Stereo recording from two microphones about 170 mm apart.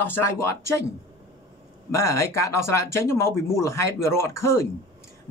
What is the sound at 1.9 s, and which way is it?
Speech, 15° left (ahead or behind).